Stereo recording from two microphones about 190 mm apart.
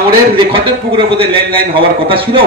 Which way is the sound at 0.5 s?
25° right (ahead or behind).